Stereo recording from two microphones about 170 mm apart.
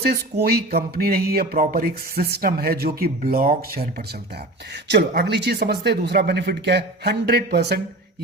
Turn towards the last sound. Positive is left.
turn(degrees=-75)  # may be behind; listen again after turning